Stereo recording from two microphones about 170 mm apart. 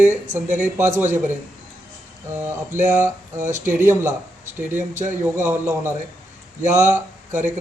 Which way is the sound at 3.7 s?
15° right (ahead or behind).